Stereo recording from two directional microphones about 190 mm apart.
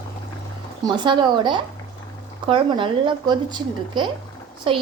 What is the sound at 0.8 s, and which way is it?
A woman's voice, 25° right (ahead or behind).